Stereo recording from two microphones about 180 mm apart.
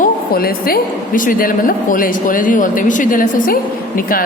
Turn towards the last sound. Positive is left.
turn(degrees=50)  # may be behind; listen again after turning